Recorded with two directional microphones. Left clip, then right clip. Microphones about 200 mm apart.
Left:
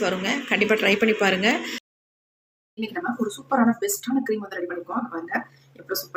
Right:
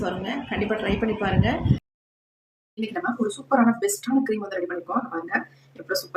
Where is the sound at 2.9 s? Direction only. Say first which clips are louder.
Right 1 dB; centre (ahead or behind).